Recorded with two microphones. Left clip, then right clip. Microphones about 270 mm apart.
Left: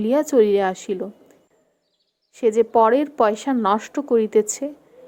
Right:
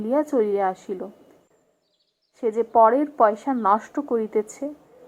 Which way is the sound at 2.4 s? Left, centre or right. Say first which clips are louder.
Left 1 dB; left.